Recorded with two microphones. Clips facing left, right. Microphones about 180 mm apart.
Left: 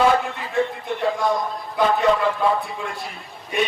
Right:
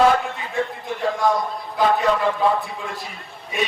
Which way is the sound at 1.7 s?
Centre (ahead or behind).